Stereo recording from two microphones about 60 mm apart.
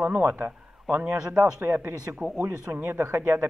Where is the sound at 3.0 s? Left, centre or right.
Right.